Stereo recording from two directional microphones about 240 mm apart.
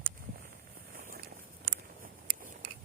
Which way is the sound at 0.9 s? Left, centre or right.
Right.